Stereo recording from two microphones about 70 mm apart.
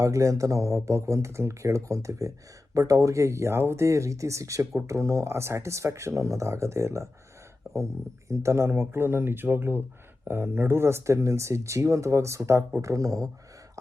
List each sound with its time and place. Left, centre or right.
0.0 s speech: right